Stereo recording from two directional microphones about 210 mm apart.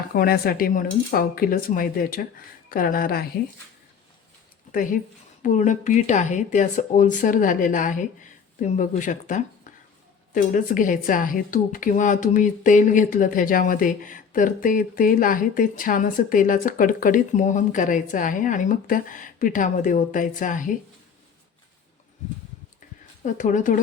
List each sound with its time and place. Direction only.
0.1 s a woman's voice: 45° left (ahead or behind)
4.7 s a woman's voice: 40° left (ahead or behind)
23.2 s a woman's voice: 35° left (ahead or behind)